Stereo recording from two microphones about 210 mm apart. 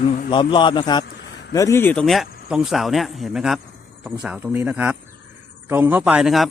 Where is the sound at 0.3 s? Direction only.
20° left (ahead or behind).